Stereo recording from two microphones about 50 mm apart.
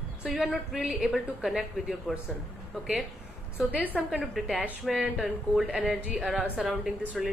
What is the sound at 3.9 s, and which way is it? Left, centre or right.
A woman's voice, centre.